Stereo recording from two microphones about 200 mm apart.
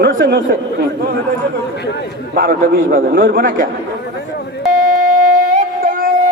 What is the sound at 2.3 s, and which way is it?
Speech, 45° right (ahead or behind).